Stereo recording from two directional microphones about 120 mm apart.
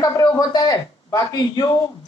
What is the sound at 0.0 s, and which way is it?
A man's voice, 30° left (ahead or behind).